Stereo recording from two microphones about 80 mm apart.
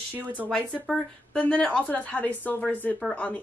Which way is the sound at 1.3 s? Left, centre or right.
Centre.